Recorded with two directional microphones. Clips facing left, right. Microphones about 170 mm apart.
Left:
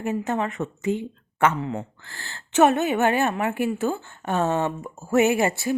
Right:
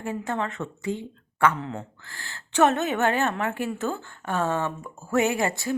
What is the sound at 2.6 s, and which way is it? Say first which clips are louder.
A woman's voice: left 3 dB; 15° left (ahead or behind).